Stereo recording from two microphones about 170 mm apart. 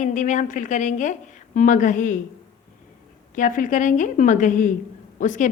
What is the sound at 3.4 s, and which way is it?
A woman's voice, 50° left (ahead or behind).